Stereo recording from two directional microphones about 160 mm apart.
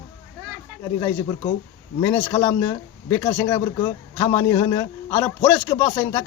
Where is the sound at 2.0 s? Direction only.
20° left (ahead or behind).